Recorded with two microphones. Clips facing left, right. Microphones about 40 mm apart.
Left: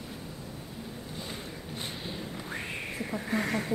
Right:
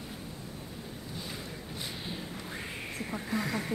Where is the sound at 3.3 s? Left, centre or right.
Left.